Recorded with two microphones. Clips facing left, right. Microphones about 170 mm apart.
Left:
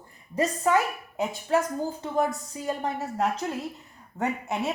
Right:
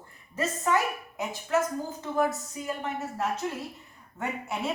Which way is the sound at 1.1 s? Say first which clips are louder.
Left 3 dB; 30° left (ahead or behind).